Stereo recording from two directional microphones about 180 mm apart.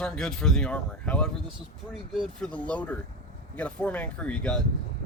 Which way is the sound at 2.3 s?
5° left (ahead or behind).